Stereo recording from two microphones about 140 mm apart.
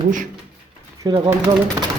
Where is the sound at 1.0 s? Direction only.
25° right (ahead or behind).